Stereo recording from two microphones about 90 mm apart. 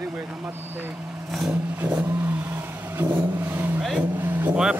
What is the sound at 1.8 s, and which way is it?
Speech, 15° right (ahead or behind).